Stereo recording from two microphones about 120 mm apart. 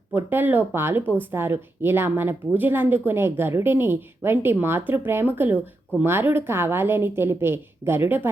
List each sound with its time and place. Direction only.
0.1 s a woman's voice: 15° right (ahead or behind)